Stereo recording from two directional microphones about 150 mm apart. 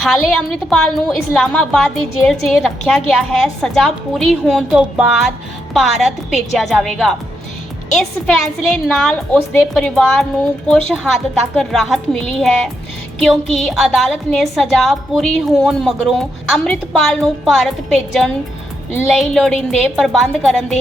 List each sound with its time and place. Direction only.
0.0 s a woman's voice: 5° left (ahead or behind)